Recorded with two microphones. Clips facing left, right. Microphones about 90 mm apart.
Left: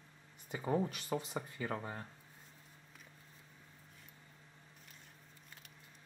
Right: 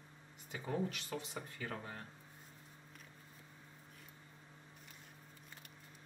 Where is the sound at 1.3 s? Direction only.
25° left (ahead or behind).